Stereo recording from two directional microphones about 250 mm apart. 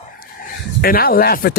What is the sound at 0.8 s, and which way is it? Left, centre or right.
Speech, left.